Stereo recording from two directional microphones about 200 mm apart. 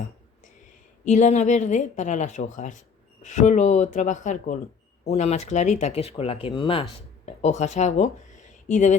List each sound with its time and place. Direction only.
1.0 s a woman's voice: 35° left (ahead or behind)
7.4 s a woman's voice: 35° left (ahead or behind)